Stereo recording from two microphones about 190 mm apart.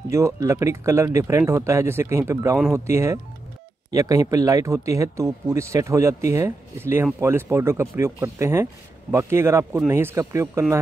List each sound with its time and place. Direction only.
0.1 s speech: 15° right (ahead or behind)